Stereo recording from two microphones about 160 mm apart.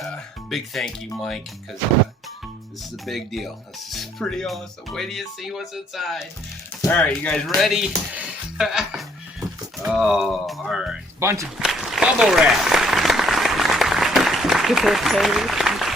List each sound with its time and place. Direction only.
0.0 s speech: centre (ahead or behind)
3.1 s speech: centre (ahead or behind)
6.8 s speech: 10° left (ahead or behind)
11.2 s speech: 15° right (ahead or behind)
11.5 s applause: centre (ahead or behind)